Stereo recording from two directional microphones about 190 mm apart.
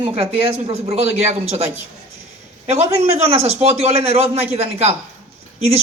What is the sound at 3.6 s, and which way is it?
Speech, 30° right (ahead or behind).